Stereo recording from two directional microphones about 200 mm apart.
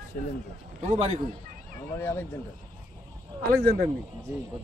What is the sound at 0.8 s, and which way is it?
Speech, 35° right (ahead or behind).